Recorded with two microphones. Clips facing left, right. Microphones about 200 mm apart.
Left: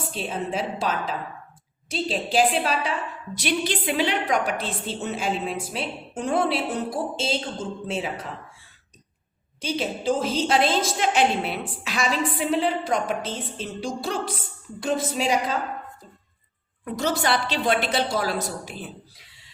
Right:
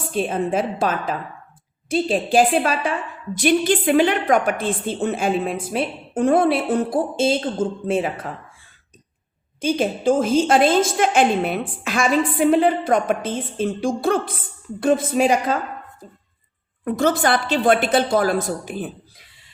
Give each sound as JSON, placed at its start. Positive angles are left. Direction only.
{"t": 0.1, "sound": "a woman's voice", "side_deg": -50}
{"t": 9.6, "sound": "a woman's voice", "side_deg": -50}
{"t": 16.8, "sound": "a woman's voice", "side_deg": -50}